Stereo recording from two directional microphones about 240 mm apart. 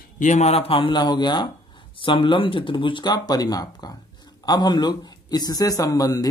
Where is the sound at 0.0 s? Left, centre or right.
Left.